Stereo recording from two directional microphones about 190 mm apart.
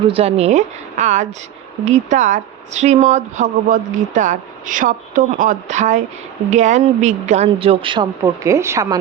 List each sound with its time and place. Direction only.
0.1 s a man's voice: 35° right (ahead or behind); by 9.0 s 15° right (ahead or behind)